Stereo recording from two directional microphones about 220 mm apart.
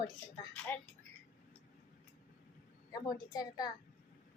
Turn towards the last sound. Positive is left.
turn(degrees=20)  # may be behind; listen again after turning